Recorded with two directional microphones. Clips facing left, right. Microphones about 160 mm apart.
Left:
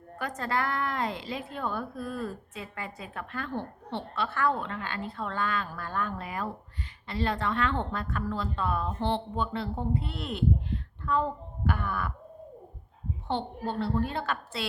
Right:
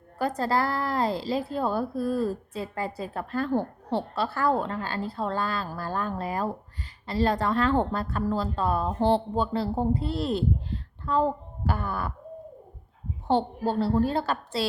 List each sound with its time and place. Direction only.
0.2 s a woman's voice: 35° right (ahead or behind)
13.2 s a woman's voice: 40° right (ahead or behind)